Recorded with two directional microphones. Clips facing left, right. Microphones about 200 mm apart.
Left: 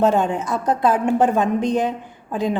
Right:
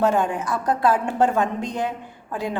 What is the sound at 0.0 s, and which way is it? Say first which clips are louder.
A woman's voice: left 3 dB; 25° left (ahead or behind).